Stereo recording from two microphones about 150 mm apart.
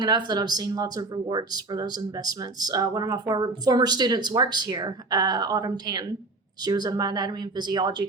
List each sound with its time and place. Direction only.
0.0 s speech: 25° right (ahead or behind)